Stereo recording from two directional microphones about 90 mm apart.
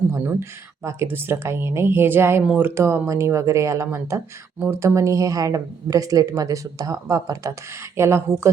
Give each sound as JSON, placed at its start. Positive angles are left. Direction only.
{"t": 0.2, "sound": "a woman's voice", "side_deg": -20}